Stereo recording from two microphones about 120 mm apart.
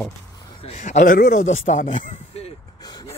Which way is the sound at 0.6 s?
70° left (ahead or behind).